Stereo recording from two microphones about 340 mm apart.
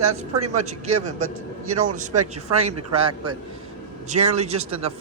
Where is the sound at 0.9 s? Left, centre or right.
Right.